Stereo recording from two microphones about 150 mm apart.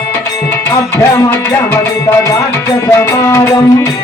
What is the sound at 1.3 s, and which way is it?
Music, 15° left (ahead or behind).